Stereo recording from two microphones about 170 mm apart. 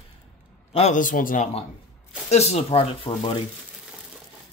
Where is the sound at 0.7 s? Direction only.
40° left (ahead or behind).